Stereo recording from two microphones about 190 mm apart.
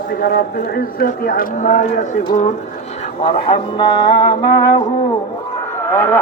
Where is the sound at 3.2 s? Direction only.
25° left (ahead or behind).